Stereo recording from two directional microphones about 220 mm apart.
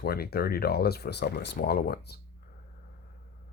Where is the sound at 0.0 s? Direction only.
45° left (ahead or behind).